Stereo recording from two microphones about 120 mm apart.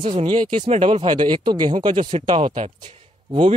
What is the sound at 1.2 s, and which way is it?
Speech, 40° right (ahead or behind).